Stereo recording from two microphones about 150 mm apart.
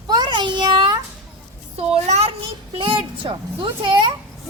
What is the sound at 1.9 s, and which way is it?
A child's voice, 45° right (ahead or behind).